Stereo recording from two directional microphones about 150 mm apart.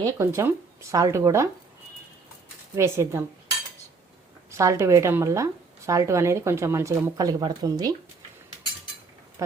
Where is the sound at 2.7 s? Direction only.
15° right (ahead or behind).